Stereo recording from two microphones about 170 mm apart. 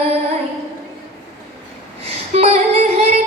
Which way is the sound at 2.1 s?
40° right (ahead or behind).